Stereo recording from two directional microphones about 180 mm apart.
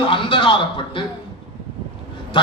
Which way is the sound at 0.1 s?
30° left (ahead or behind).